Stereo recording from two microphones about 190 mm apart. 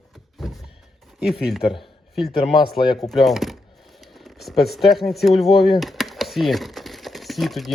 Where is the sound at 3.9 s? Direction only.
Centre (ahead or behind).